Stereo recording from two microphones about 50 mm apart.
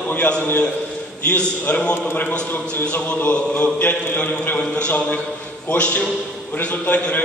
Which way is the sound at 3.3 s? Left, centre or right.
Left.